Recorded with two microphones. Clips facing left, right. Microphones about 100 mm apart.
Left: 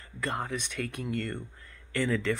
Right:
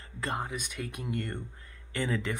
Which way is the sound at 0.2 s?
20° right (ahead or behind).